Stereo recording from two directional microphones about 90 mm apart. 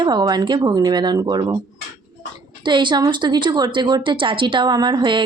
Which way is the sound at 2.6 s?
60° right (ahead or behind).